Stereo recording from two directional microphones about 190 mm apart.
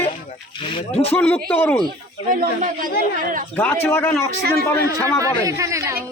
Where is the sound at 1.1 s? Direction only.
5° left (ahead or behind).